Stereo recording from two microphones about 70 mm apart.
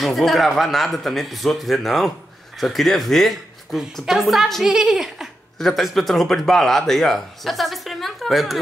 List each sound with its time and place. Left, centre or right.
0.0 s a man's voice: centre